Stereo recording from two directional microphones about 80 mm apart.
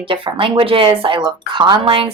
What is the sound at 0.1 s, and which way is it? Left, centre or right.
A woman's voice, right.